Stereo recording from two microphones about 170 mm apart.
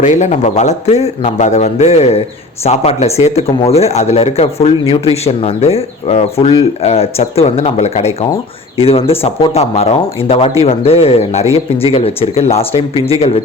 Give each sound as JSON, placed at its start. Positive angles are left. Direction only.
{"t": 0.0, "sound": "speech", "side_deg": 45}